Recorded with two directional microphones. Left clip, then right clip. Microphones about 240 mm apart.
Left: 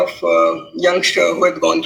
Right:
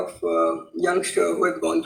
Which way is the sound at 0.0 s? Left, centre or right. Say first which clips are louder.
Left 8 dB; left.